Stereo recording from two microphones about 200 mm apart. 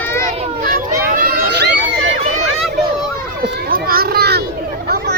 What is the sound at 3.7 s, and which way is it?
Children playing, 50° right (ahead or behind).